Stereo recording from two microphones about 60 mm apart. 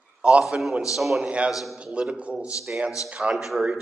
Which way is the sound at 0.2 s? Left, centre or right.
Centre.